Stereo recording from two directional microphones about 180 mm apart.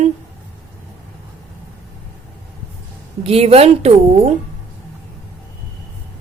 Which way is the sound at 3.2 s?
35° right (ahead or behind).